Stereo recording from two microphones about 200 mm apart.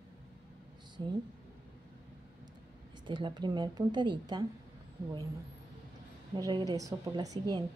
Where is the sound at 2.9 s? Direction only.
20° right (ahead or behind).